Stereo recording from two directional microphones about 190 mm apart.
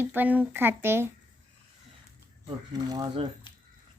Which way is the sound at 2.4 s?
20° right (ahead or behind).